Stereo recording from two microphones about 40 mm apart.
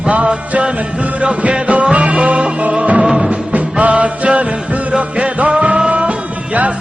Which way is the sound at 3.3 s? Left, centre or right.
Right.